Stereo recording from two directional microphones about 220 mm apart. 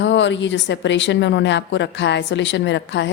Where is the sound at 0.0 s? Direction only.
55° left (ahead or behind).